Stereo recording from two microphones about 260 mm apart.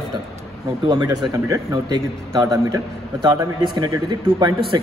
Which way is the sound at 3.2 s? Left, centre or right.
Centre.